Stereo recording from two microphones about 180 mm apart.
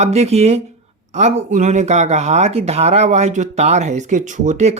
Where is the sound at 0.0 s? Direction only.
35° right (ahead or behind).